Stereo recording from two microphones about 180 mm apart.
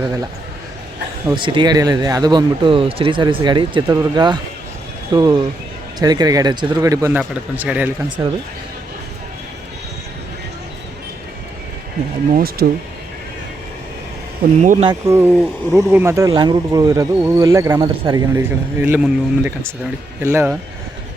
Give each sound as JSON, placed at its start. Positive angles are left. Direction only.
{"t": 0.0, "sound": "speech", "side_deg": -15}
{"t": 1.3, "sound": "speech", "side_deg": -25}
{"t": 8.2, "sound": "speech", "side_deg": -20}
{"t": 12.6, "sound": "speech", "side_deg": -60}
{"t": 14.6, "sound": "speech", "side_deg": -45}
{"t": 14.8, "sound": "speech", "side_deg": -15}
{"t": 18.4, "sound": "speech", "side_deg": -10}